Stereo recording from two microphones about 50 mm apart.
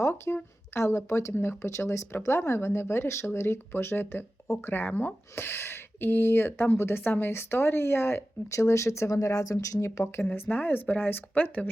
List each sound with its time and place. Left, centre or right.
0.3 s speech: left
0.8 s speech: left
1.3 s speech: left
2.2 s speech: left
5.3 s speech: left
8.4 s speech: left
10.0 s speech: left